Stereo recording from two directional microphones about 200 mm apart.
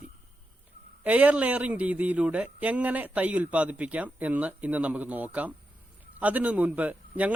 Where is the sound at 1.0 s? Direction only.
5° right (ahead or behind).